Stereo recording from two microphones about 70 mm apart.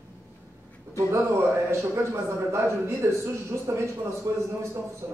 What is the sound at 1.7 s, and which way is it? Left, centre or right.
A man's voice, right.